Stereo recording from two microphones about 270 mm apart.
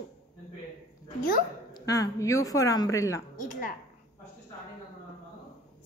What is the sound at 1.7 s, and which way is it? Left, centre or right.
A woman's voice, centre.